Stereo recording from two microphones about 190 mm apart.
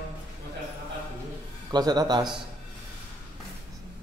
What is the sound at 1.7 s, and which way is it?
Speech, 20° right (ahead or behind).